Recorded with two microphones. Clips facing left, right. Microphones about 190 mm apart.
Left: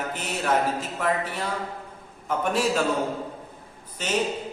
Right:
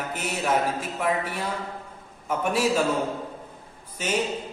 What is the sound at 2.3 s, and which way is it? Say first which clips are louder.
Speech: even; 10° right (ahead or behind).